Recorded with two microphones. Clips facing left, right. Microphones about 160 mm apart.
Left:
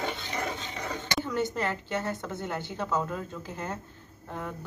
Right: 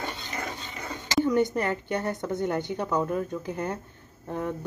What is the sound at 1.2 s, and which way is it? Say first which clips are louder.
A woman's voice: right 5 dB; 15° right (ahead or behind).